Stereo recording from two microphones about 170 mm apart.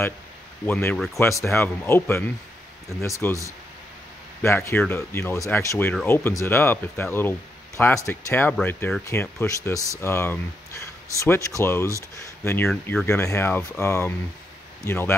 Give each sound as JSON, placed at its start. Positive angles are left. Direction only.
{"t": 0.7, "sound": "speech", "side_deg": 15}
{"t": 0.9, "sound": "speech", "side_deg": 0}
{"t": 1.2, "sound": "speech", "side_deg": 15}
{"t": 4.4, "sound": "speech", "side_deg": 15}